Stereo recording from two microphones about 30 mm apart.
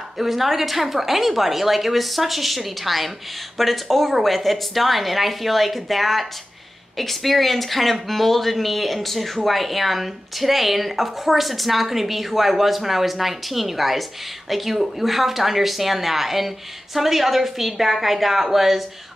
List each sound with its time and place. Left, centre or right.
0.2 s speech: centre